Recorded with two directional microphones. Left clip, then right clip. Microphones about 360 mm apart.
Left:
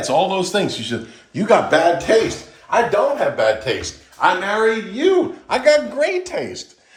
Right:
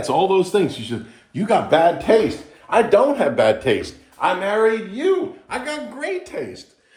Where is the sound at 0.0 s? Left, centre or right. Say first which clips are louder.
Even; centre.